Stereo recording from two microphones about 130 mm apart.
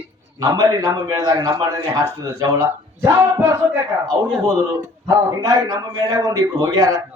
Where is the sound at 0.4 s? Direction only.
25° right (ahead or behind).